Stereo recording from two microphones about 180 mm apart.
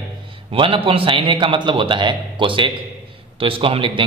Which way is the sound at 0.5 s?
30° right (ahead or behind).